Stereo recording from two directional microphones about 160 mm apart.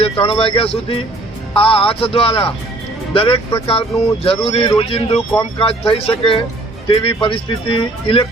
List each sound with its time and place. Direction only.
0.0 s speech: 35° left (ahead or behind)